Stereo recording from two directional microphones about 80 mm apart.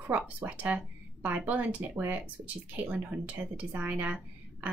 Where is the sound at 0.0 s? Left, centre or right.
Centre.